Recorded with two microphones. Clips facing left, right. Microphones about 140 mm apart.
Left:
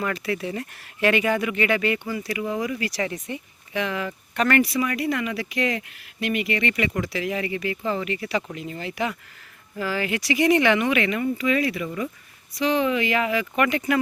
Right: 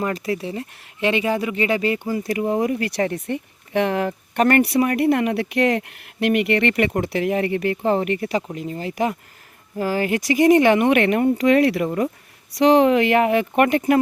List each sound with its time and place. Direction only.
0.0 s speech: 35° right (ahead or behind); by 12.1 s 55° right (ahead or behind)
12.5 s speech: 75° right (ahead or behind); by 14.0 s 50° right (ahead or behind)